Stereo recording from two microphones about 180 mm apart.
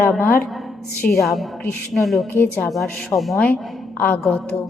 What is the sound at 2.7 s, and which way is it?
A woman's voice, centre (ahead or behind).